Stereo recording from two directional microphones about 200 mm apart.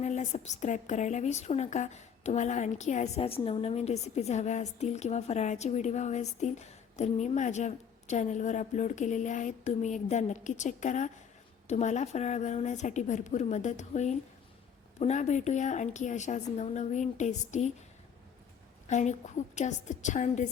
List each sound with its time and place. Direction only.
0.0 s a woman's voice: 35° left (ahead or behind)
18.9 s a woman's voice: 35° left (ahead or behind)